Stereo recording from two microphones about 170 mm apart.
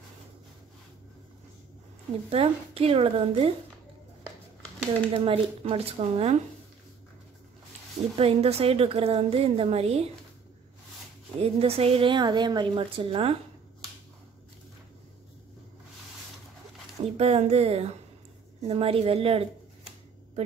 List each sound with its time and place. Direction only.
2.2 s a woman's voice: 35° right (ahead or behind)
5.1 s a woman's voice: 35° right (ahead or behind)
8.2 s a woman's voice: 35° right (ahead or behind)
11.3 s a woman's voice: 35° right (ahead or behind)
17.0 s a woman's voice: 40° right (ahead or behind)